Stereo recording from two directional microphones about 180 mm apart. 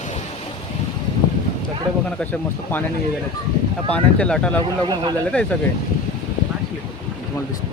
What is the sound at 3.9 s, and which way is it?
Speech, 5° left (ahead or behind).